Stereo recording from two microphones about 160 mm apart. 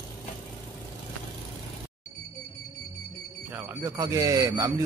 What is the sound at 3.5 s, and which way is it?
Speech, 15° right (ahead or behind).